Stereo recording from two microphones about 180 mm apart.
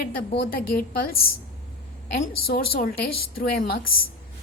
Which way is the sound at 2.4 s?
55° left (ahead or behind).